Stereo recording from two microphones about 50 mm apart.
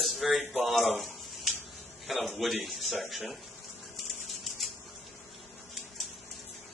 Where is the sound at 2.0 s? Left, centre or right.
Centre.